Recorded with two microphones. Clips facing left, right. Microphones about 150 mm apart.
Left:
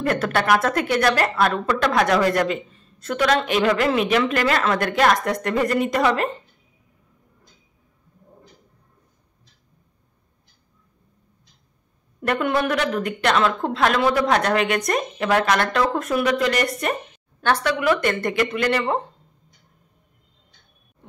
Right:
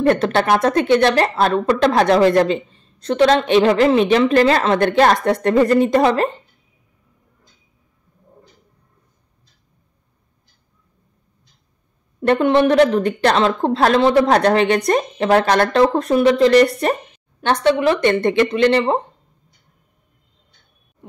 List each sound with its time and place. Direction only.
0.0 s speech: 25° right (ahead or behind)
12.2 s a woman's voice: 25° right (ahead or behind)